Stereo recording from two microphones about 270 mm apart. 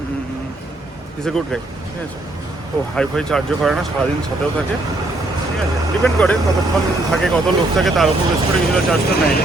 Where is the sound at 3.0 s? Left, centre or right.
Centre.